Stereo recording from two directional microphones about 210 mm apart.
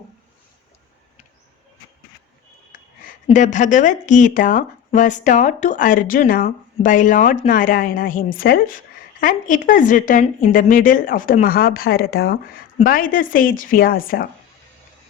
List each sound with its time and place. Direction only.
3.2 s a woman's voice: 35° left (ahead or behind)